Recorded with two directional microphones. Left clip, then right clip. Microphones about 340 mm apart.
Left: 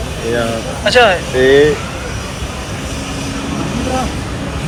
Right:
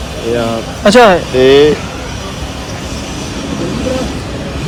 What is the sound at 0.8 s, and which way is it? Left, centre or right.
Speech, centre.